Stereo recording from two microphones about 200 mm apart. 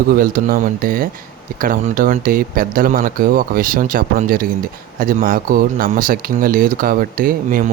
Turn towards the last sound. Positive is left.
turn(degrees=-45)  # may be behind; listen again after turning